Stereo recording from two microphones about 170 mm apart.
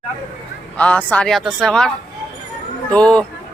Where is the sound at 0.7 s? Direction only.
10° left (ahead or behind).